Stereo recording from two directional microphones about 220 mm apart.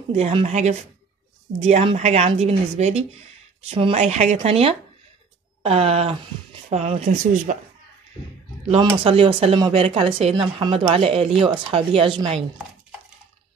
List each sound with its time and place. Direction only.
0.1 s a woman's voice: 25° right (ahead or behind)
9.0 s a woman's voice: 25° right (ahead or behind)